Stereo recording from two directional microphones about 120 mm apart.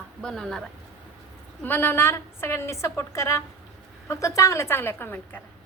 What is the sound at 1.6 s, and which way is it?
A woman's voice, 15° left (ahead or behind).